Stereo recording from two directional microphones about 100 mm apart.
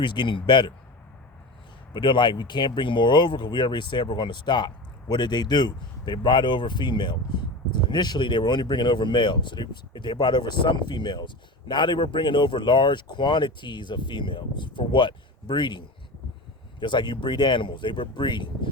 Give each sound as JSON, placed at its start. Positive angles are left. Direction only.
{"t": 0.0, "sound": "speech", "side_deg": 50}
{"t": 1.9, "sound": "speech", "side_deg": 50}
{"t": 16.8, "sound": "speech", "side_deg": 50}